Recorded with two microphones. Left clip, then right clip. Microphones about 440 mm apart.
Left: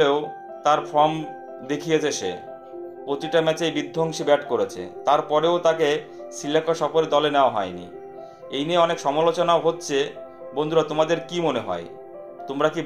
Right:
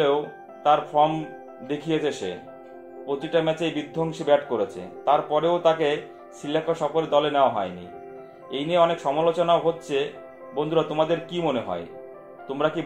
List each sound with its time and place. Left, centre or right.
0.7 s speech: centre